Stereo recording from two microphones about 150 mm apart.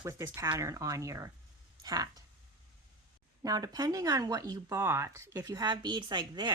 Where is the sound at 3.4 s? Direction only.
25° right (ahead or behind).